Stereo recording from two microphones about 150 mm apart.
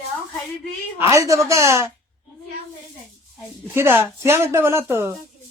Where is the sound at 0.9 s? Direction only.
20° right (ahead or behind).